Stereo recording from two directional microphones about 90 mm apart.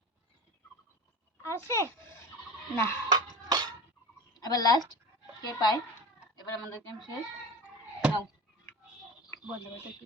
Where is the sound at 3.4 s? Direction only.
50° right (ahead or behind).